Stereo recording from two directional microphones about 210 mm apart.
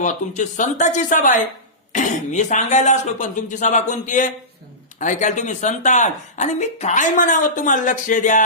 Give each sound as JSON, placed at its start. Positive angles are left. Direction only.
{"t": 0.0, "sound": "speech", "side_deg": 35}